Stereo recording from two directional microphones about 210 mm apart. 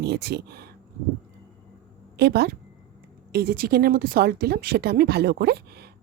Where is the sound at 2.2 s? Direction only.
50° right (ahead or behind).